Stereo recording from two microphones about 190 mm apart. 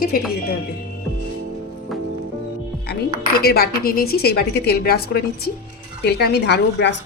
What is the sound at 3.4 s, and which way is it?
A woman's voice, 55° left (ahead or behind).